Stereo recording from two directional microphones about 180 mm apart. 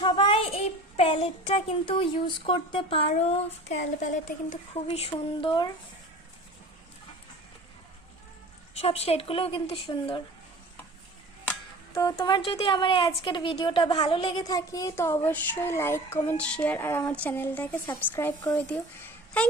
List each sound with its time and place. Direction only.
0.0 s a child's voice: 30° left (ahead or behind)
8.8 s a child's voice: 35° left (ahead or behind)
11.9 s a woman's voice: 20° left (ahead or behind)